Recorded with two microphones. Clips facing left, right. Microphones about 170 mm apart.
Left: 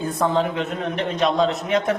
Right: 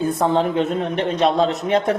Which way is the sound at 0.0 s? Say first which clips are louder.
Right 3 dB; 25° right (ahead or behind).